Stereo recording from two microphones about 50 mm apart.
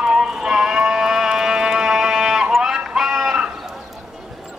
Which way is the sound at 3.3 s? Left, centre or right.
Centre.